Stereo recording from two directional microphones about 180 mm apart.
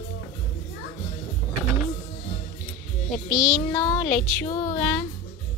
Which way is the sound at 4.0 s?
5° left (ahead or behind).